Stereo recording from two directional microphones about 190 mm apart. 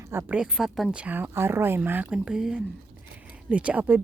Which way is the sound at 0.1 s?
10° right (ahead or behind).